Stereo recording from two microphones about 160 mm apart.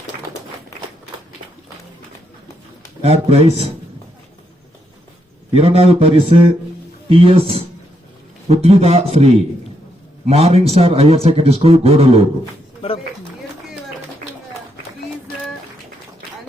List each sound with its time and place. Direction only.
3.0 s a man's voice: 40° right (ahead or behind)
5.5 s a man's voice: 40° right (ahead or behind)